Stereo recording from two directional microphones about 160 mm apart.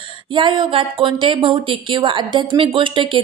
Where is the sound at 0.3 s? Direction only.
30° right (ahead or behind).